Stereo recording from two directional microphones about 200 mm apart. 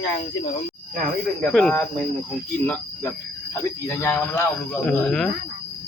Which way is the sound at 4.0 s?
10° left (ahead or behind).